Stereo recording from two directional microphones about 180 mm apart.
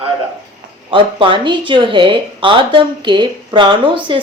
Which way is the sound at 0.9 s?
30° right (ahead or behind).